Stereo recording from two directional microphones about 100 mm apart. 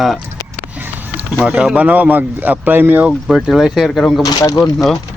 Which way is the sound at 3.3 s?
5° right (ahead or behind).